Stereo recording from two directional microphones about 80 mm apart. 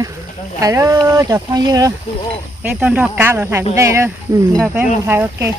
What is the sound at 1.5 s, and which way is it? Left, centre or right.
Speech, right.